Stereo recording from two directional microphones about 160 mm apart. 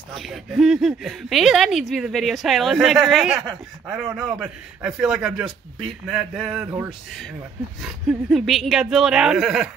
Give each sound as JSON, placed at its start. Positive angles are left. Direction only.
{"t": 0.1, "sound": "a woman's voice", "side_deg": 0}
{"t": 6.6, "sound": "speech", "side_deg": -15}
{"t": 7.8, "sound": "a woman's voice", "side_deg": 0}